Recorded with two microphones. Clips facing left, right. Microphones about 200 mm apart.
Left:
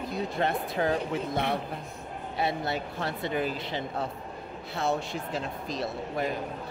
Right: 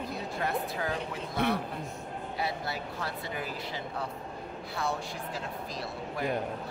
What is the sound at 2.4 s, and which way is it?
Speech, 25° left (ahead or behind).